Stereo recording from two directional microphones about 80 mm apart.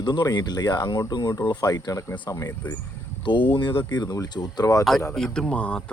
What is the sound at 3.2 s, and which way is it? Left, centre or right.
Speech, left.